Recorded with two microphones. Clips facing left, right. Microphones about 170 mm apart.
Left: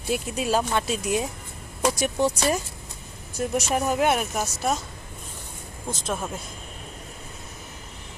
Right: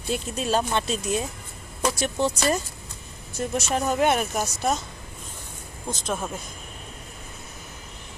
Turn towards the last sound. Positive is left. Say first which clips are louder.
# even
turn(degrees=0)  # may be behind; listen again after turning